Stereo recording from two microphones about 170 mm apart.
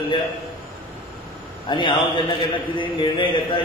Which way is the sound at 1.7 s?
30° left (ahead or behind).